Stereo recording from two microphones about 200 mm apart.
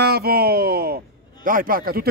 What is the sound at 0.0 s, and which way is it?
Speech, 50° right (ahead or behind).